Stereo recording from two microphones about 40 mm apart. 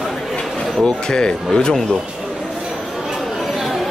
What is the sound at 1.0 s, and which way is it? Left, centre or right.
Speech, left.